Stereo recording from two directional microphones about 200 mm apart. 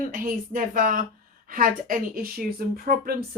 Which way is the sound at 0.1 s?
45° right (ahead or behind).